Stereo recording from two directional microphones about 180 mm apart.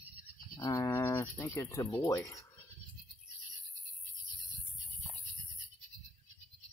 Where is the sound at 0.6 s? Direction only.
15° left (ahead or behind).